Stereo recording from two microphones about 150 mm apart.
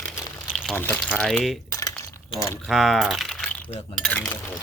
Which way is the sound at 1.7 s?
20° left (ahead or behind).